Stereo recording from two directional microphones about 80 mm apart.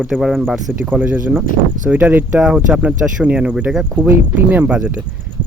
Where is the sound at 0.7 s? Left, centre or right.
Centre.